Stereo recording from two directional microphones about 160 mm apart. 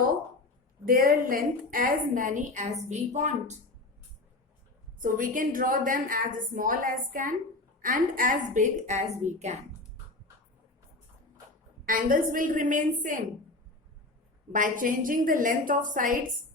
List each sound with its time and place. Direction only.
0.9 s a woman's voice: 60° right (ahead or behind); by 3.6 s 45° right (ahead or behind)
4.9 s a woman's voice: 55° right (ahead or behind)
11.9 s a woman's voice: 60° right (ahead or behind)
14.5 s a woman's voice: 55° right (ahead or behind)